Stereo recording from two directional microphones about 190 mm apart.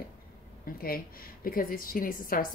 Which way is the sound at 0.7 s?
50° left (ahead or behind).